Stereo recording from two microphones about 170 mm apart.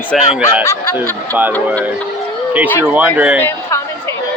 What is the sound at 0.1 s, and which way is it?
Speech, centre (ahead or behind).